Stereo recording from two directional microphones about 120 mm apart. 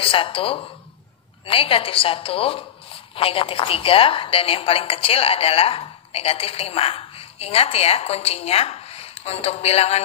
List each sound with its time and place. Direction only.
0.0 s a woman's voice: 50° left (ahead or behind)